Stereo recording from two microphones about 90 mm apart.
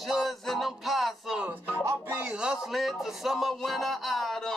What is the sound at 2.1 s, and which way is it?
Music, 15° right (ahead or behind).